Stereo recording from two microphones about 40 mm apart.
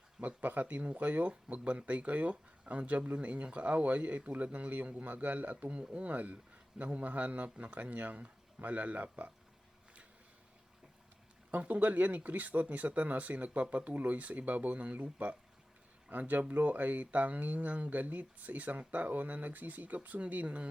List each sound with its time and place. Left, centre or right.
0.2 s a man's voice: right
11.5 s speech: right
13.9 s a man's voice: right